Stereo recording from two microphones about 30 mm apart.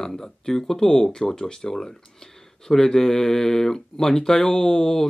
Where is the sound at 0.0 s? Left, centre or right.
Centre.